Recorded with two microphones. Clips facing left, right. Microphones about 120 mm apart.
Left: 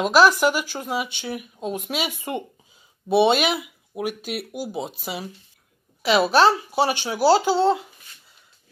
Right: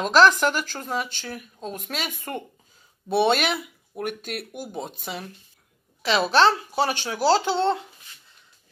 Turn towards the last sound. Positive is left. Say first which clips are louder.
# left 3 dB
turn(degrees=5)  # may be behind; listen again after turning